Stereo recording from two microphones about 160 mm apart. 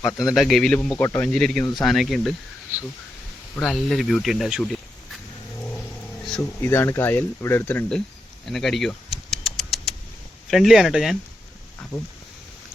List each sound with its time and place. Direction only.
0.0 s speech: centre (ahead or behind); by 1.3 s 15° left (ahead or behind)
1.3 s speech: 5° left (ahead or behind)
3.5 s speech: centre (ahead or behind)
6.6 s speech: 15° left (ahead or behind)
8.4 s a sound: centre (ahead or behind)
10.5 s speech: centre (ahead or behind)